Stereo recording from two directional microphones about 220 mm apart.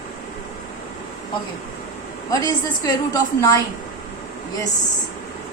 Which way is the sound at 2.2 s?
15° left (ahead or behind).